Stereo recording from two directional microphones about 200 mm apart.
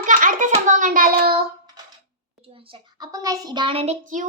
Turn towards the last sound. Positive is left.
turn(degrees=-35)  # may be behind; listen again after turning